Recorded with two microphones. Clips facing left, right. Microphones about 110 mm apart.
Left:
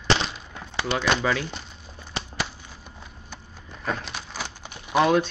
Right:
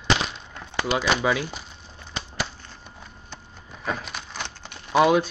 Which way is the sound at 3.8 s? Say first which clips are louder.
Even; centre (ahead or behind).